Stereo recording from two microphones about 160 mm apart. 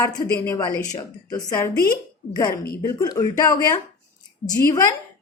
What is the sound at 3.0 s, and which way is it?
A woman's voice, 25° left (ahead or behind).